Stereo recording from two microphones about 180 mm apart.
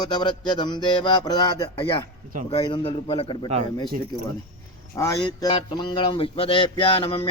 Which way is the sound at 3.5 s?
35° right (ahead or behind).